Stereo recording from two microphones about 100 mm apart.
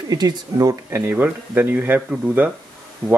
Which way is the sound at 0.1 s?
40° right (ahead or behind).